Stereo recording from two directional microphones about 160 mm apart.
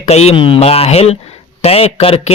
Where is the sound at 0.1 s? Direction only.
40° left (ahead or behind).